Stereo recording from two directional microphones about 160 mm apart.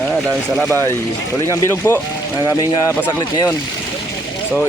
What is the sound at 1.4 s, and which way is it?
Speech, 20° left (ahead or behind).